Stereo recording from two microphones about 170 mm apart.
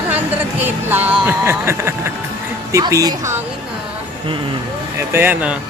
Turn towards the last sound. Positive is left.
turn(degrees=-10)  # may be behind; listen again after turning